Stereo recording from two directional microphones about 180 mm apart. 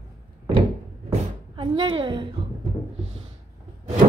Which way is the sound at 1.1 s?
30° right (ahead or behind).